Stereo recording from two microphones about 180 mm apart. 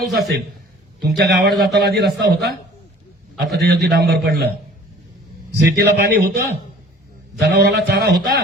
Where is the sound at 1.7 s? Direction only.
60° right (ahead or behind).